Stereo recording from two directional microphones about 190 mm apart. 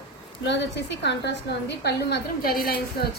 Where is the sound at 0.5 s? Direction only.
65° left (ahead or behind).